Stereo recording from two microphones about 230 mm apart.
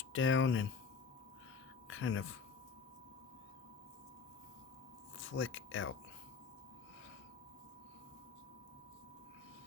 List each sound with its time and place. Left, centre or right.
0.1 s speech: left
1.9 s speech: left
5.1 s speech: left